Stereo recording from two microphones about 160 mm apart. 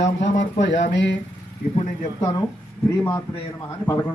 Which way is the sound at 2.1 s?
25° left (ahead or behind).